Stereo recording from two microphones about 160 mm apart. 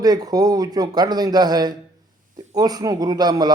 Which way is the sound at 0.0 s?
25° right (ahead or behind).